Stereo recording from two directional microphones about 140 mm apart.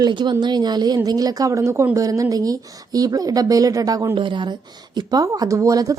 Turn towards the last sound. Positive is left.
turn(degrees=-25)  # may be behind; listen again after turning